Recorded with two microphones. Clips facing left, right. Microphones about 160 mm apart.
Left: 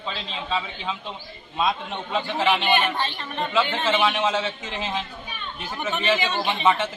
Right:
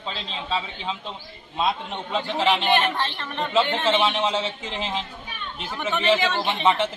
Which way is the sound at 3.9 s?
25° right (ahead or behind).